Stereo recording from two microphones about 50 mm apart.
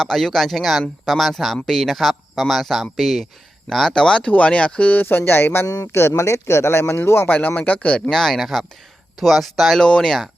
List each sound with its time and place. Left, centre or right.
0.0 s speech: centre
3.9 s speech: centre
5.0 s speech: left
5.8 s speech: left
7.3 s speech: left
8.1 s speech: centre
9.8 s speech: centre